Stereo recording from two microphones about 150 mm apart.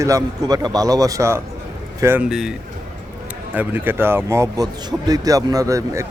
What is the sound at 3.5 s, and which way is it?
A man's voice, 15° right (ahead or behind).